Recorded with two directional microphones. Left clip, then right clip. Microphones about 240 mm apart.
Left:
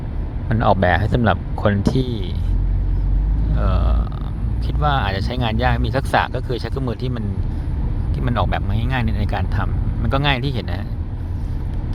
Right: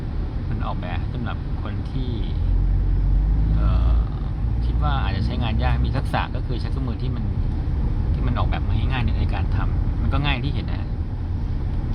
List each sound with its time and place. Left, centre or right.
0.6 s speech: left
3.6 s a sound: left
4.8 s speech: left
8.2 s speech: left